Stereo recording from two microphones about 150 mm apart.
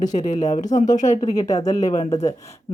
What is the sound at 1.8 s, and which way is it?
Speech, 45° left (ahead or behind).